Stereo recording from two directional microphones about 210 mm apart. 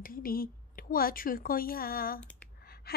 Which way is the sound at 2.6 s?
45° left (ahead or behind).